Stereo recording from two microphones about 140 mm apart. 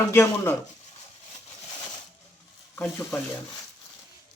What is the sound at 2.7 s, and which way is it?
Speech, 20° left (ahead or behind).